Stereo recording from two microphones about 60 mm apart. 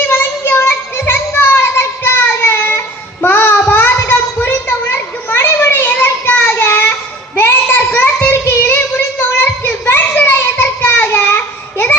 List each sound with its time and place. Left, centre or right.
0.1 s music: left
7.3 s a sound: left
8.4 s children playing: left
10.8 s child singing: left